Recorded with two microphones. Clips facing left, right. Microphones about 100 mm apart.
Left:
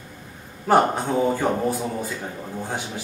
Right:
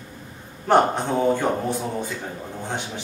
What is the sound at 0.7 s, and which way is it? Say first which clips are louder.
A man's voice: even; 5° left (ahead or behind).